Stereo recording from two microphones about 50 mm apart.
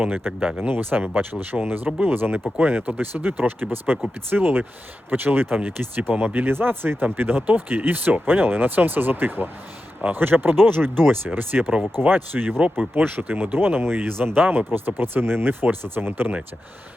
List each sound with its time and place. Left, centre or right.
0.0 s speech: right
0.8 s speech: right
11.5 s speech: right
12.0 s speech: right
15.6 s speech: right